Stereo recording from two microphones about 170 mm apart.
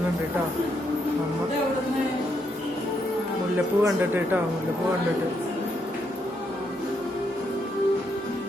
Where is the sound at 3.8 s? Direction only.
10° right (ahead or behind).